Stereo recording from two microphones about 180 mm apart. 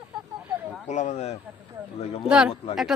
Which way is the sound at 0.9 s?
40° left (ahead or behind).